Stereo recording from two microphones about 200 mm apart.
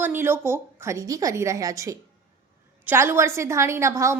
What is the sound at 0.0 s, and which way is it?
A woman's voice, 10° right (ahead or behind).